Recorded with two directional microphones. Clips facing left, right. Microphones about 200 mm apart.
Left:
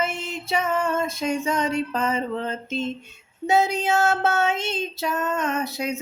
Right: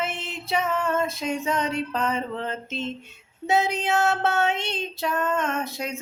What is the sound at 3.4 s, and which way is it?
Female singing, centre (ahead or behind).